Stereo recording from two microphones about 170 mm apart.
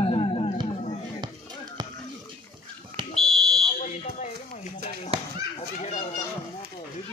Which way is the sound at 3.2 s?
Centre (ahead or behind).